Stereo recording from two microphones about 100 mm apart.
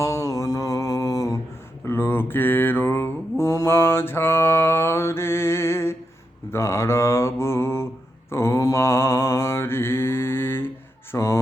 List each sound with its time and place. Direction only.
0.0 s mantra: 35° left (ahead or behind)
11.1 s speech: 30° left (ahead or behind)